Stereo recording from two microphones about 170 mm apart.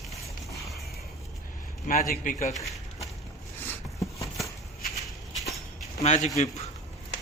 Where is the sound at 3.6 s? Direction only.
20° left (ahead or behind).